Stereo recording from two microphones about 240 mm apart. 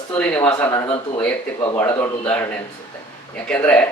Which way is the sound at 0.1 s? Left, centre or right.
Centre.